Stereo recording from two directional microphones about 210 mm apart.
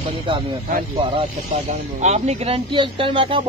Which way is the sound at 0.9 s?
25° right (ahead or behind).